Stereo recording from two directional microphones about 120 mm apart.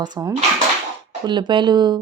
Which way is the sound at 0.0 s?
30° right (ahead or behind).